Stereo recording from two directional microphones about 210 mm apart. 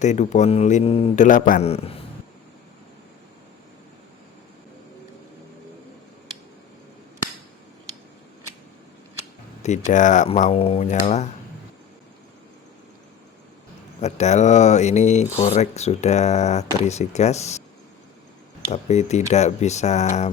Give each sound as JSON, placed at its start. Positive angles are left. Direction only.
{"t": 0.0, "sound": "speech", "side_deg": 35}
{"t": 9.6, "sound": "speech", "side_deg": 35}
{"t": 14.0, "sound": "speech", "side_deg": 35}
{"t": 18.7, "sound": "speech", "side_deg": 30}